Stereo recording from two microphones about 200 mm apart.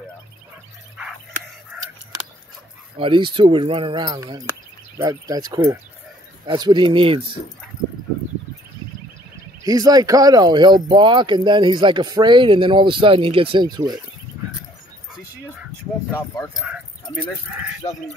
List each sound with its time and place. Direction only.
3.0 s speech: 25° right (ahead or behind)
9.7 s speech: 20° right (ahead or behind)
16.1 s speech: 15° left (ahead or behind)
16.5 s speech: 5° right (ahead or behind)